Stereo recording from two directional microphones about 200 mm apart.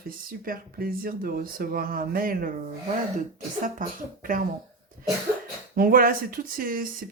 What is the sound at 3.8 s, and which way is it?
Speech, 40° right (ahead or behind).